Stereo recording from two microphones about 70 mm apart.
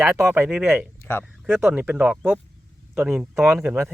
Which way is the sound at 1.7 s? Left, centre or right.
Right.